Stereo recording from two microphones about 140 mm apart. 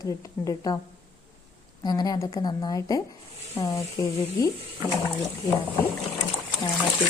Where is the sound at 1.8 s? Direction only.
30° left (ahead or behind).